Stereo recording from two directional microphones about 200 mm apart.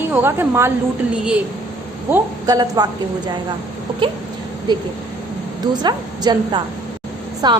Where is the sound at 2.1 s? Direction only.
20° right (ahead or behind).